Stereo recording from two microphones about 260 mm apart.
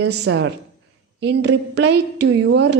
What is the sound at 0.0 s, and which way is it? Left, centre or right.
Speech, right.